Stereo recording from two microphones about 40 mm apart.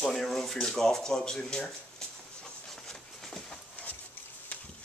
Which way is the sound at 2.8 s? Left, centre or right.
Centre.